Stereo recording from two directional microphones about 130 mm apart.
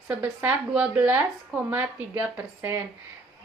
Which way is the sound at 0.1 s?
10° right (ahead or behind).